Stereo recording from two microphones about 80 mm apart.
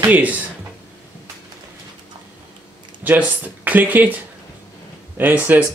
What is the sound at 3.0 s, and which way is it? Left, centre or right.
Speech, right.